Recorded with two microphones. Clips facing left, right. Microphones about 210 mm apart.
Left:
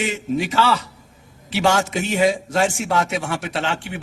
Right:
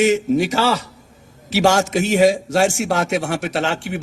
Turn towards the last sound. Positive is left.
turn(degrees=-45)  # may be behind; listen again after turning